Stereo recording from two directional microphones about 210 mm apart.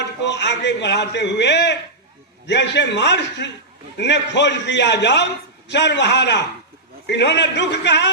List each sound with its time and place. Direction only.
0.0 s a man's voice: 55° left (ahead or behind)